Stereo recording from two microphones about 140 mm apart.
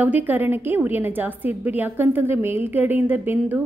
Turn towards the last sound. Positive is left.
turn(degrees=-15)  # may be behind; listen again after turning